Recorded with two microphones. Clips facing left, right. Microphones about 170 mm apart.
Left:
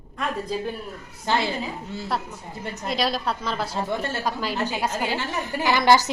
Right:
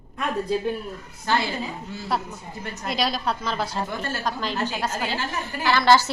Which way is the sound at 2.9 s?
Centre (ahead or behind).